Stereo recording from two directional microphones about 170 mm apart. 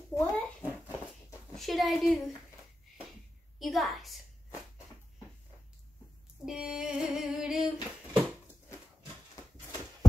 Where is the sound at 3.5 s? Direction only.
Centre (ahead or behind).